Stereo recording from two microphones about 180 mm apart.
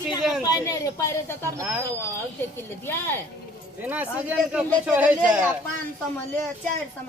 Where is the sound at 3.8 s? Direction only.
10° right (ahead or behind).